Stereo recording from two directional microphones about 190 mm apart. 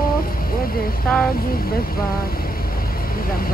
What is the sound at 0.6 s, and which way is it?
Vehicle, 50° left (ahead or behind).